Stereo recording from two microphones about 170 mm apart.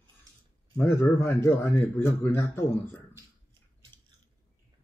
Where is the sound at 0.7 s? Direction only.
15° left (ahead or behind).